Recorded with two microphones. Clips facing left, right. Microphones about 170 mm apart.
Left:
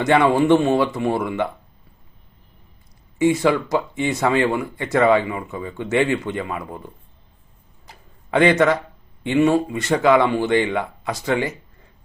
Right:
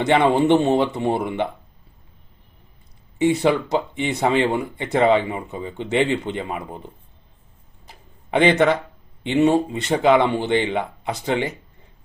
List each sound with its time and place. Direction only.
0.0 s speech: 20° right (ahead or behind)
3.4 s speech: 25° right (ahead or behind)
8.3 s speech: 20° right (ahead or behind)